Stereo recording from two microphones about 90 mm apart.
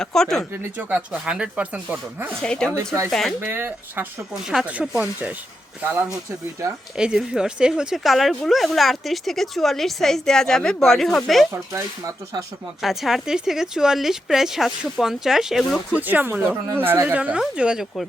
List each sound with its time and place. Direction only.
0.0 s speech: 5° left (ahead or behind)
0.5 s speech: 20° right (ahead or behind)
2.4 s speech: 10° left (ahead or behind)
3.4 s speech: 25° right (ahead or behind)
6.9 s speech: 5° right (ahead or behind)
12.8 s speech: 5° right (ahead or behind)
16.0 s speech: 20° right (ahead or behind)